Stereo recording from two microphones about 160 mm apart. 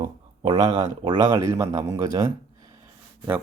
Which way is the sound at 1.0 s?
25° right (ahead or behind).